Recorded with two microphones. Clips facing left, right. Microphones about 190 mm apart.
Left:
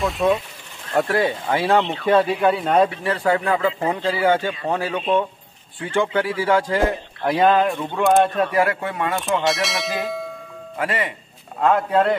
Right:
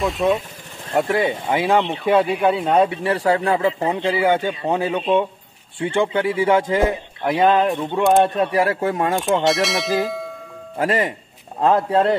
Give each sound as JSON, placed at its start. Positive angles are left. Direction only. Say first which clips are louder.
{"t": 0.0, "sound": "speech", "louder": "even", "side_deg": 0}
{"t": 0.9, "sound": "speech", "louder": "right 1 dB", "side_deg": -15}
{"t": 8.6, "sound": "speech", "louder": "right 4 dB", "side_deg": -40}
{"t": 9.4, "sound": "speech", "louder": "right 3 dB", "side_deg": 0}
{"t": 10.8, "sound": "speech", "louder": "right 5 dB", "side_deg": -40}
{"t": 11.6, "sound": "speech", "louder": "right 1 dB", "side_deg": -30}